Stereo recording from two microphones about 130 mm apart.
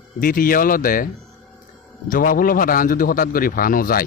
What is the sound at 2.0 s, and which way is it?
A man's voice, 90° left.